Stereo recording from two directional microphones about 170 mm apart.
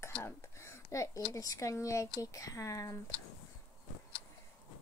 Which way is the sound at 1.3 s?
20° left (ahead or behind).